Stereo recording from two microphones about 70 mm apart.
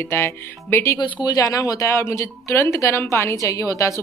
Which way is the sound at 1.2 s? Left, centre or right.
Left.